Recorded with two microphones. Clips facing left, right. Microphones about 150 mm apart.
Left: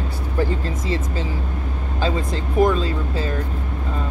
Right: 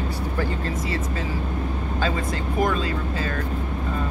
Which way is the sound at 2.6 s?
25° left (ahead or behind).